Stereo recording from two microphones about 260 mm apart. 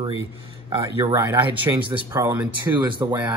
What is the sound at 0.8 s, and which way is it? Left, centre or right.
Speech, centre.